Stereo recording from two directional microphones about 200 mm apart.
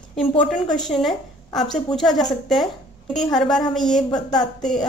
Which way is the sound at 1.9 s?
Centre (ahead or behind).